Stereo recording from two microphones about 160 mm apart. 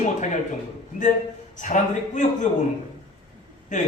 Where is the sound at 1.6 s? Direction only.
50° left (ahead or behind).